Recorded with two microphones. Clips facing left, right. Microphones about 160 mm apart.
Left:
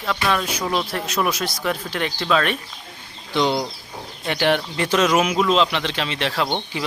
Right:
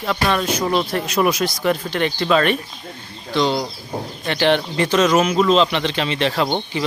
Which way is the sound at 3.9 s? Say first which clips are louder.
Right 14 dB; 50° right (ahead or behind).